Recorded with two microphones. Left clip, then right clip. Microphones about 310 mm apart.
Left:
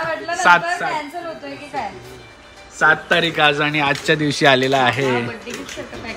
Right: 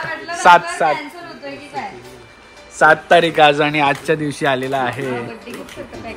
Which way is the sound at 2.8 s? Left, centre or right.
Centre.